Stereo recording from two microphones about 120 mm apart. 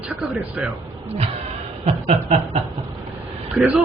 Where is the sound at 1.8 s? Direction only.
70° right (ahead or behind).